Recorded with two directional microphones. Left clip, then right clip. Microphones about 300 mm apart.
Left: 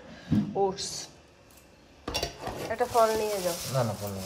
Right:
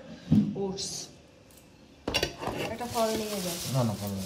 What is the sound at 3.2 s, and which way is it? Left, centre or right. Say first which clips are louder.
Speech: left 5 dB; centre.